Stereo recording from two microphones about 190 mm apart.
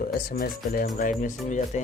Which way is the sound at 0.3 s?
45° left (ahead or behind).